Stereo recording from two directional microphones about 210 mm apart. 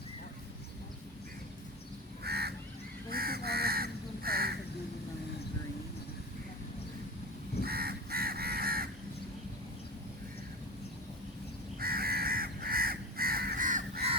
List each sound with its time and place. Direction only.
2.2 s crow: 50° right (ahead or behind)
7.6 s crow: 45° right (ahead or behind)
11.8 s crow: 45° right (ahead or behind)